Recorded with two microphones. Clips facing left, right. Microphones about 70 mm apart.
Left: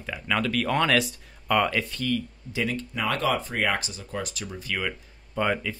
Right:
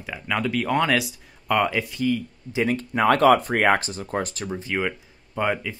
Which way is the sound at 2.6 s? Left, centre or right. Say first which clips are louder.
Right 6 dB; right.